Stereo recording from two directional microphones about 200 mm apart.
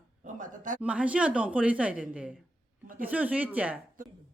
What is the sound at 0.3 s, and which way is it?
Speech, 40° right (ahead or behind).